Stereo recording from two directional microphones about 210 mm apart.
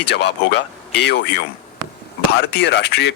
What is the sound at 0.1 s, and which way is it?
Speech, 55° left (ahead or behind).